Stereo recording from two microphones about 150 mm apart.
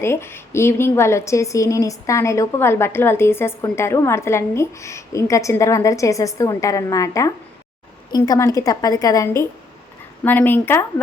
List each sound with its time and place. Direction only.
0.0 s a woman's voice: 15° left (ahead or behind)